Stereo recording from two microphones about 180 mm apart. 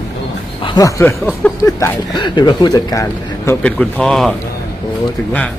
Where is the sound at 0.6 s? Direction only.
20° left (ahead or behind); by 4.4 s 5° left (ahead or behind).